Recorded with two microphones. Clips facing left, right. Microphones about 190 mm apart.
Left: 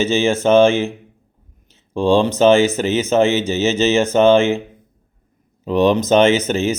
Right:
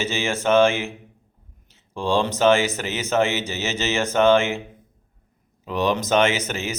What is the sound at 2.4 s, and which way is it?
Speech, 20° left (ahead or behind).